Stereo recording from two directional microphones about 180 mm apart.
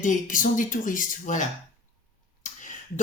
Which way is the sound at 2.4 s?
45° left (ahead or behind).